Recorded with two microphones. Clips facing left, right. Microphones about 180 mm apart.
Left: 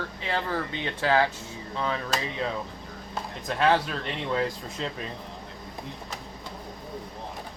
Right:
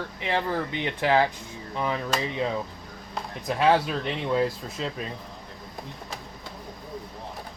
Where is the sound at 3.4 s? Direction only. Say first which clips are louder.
Right 2 dB; 10° right (ahead or behind).